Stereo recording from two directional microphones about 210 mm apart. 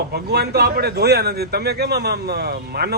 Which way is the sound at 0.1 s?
50° right (ahead or behind).